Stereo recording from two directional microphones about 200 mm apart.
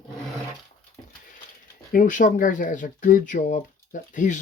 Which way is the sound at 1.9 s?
40° left (ahead or behind).